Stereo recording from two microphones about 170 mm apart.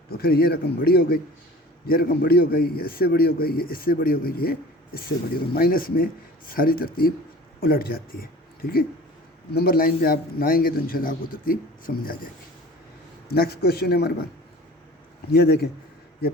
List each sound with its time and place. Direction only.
0.1 s a man's voice: 60° left (ahead or behind)
9.5 s a man's voice: 65° left (ahead or behind)
13.3 s speech: 65° left (ahead or behind)
15.3 s a man's voice: 65° left (ahead or behind)